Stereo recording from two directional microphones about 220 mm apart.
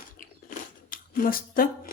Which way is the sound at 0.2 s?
40° left (ahead or behind).